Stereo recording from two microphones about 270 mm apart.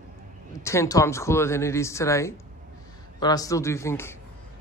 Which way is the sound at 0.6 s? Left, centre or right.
Centre.